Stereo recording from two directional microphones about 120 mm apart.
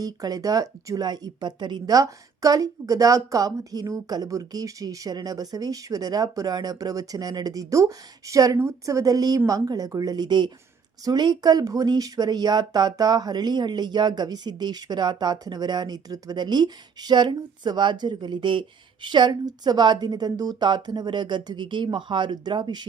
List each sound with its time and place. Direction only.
0.0 s speech: 30° right (ahead or behind)